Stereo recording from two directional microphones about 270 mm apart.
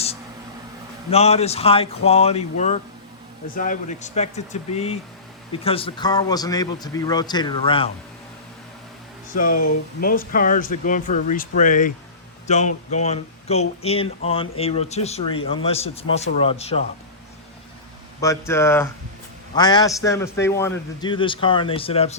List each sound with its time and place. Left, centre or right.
1.1 s a man's voice: left
9.4 s speech: left
10.0 s speech: left
18.2 s a man's voice: centre